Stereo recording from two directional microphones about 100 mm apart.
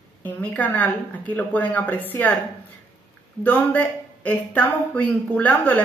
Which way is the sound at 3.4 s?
15° left (ahead or behind).